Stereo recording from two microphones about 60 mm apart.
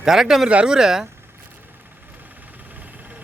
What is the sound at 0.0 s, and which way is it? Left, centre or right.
Speech, centre.